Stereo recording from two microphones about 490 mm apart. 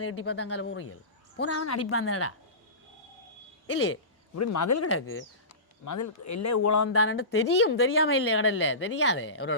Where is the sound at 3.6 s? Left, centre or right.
Left.